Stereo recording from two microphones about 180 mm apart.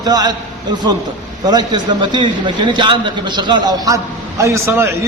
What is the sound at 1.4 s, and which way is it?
A man's voice, 25° right (ahead or behind).